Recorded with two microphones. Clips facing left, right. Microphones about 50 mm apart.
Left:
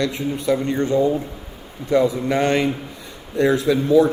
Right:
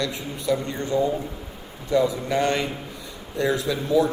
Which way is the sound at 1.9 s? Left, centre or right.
Left.